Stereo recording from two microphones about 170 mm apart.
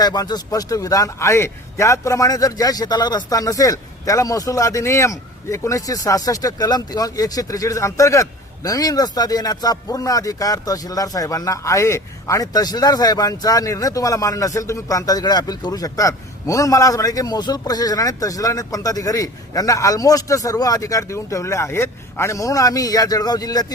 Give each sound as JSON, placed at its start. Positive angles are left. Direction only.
{"t": 0.0, "sound": "a man's voice", "side_deg": 25}